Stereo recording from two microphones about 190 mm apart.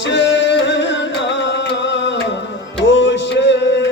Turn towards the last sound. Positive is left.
turn(degrees=70)  # may be behind; listen again after turning